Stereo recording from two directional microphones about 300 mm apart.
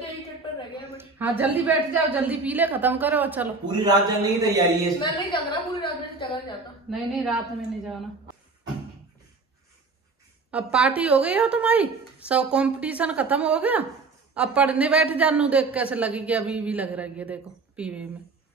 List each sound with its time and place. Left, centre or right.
0.9 s a woman's voice: centre
5.3 s a woman's voice: centre
6.9 s a man's voice: centre
10.5 s a man's voice: centre